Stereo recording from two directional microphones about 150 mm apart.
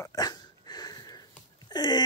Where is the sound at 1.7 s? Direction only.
30° left (ahead or behind).